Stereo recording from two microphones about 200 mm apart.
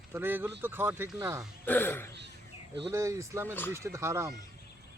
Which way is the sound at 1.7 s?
10° left (ahead or behind).